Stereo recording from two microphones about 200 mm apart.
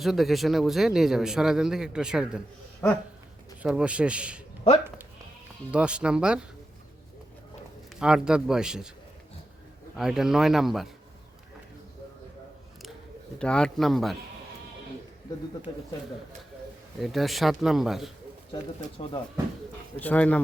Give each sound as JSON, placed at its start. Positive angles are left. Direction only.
{"t": 0.0, "sound": "speech", "side_deg": 0}
{"t": 3.6, "sound": "speech", "side_deg": -5}
{"t": 5.7, "sound": "speech", "side_deg": -5}
{"t": 7.9, "sound": "speech", "side_deg": -5}
{"t": 10.0, "sound": "speech", "side_deg": 0}
{"t": 13.4, "sound": "speech", "side_deg": 5}
{"t": 15.7, "sound": "speech", "side_deg": 20}
{"t": 17.0, "sound": "speech", "side_deg": 0}
{"t": 18.5, "sound": "speech", "side_deg": 25}
{"t": 20.0, "sound": "speech", "side_deg": 5}